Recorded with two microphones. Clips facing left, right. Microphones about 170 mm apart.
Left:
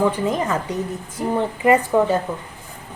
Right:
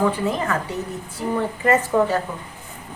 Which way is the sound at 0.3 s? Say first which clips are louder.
Left 2 dB; 20° left (ahead or behind).